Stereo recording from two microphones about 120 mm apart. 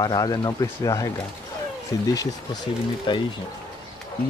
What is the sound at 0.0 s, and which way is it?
Speech, 30° left (ahead or behind).